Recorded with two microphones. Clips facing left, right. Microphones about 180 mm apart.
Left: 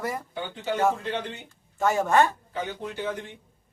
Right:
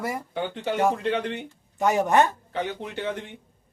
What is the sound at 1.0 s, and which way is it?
Speech, 65° right (ahead or behind).